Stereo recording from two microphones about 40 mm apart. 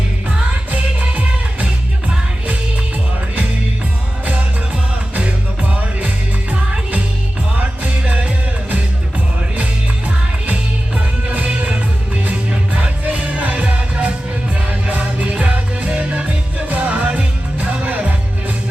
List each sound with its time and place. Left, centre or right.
0.3 s music: right
7.5 s music: right
11.3 s music: right